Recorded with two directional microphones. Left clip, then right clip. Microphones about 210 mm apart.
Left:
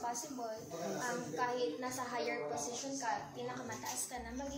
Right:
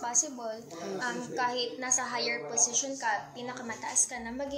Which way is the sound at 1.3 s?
45° right (ahead or behind).